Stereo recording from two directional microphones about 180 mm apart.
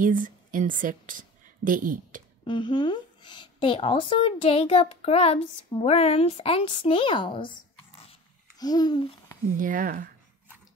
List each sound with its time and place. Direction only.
0.0 s a woman's voice: 45° right (ahead or behind)
2.4 s a woman's voice: 25° left (ahead or behind)
9.6 s speech: 50° right (ahead or behind)